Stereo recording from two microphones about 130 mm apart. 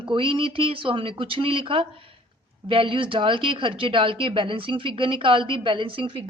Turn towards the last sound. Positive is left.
turn(degrees=-40)  # may be behind; listen again after turning